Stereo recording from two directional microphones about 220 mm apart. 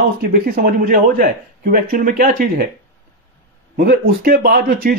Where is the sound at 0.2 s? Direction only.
40° right (ahead or behind).